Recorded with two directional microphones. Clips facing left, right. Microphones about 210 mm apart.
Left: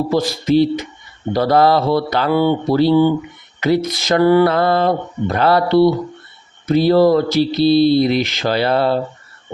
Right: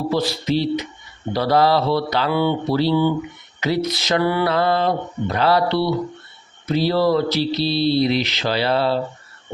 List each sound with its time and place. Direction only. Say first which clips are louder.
0.1 s speech: left 5 dB; 45° left (ahead or behind)